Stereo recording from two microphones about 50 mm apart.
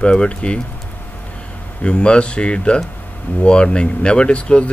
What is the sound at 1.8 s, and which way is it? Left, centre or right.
Speech, left.